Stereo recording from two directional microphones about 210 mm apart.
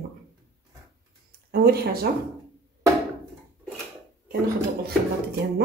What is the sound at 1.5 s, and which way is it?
Speech, 45° right (ahead or behind).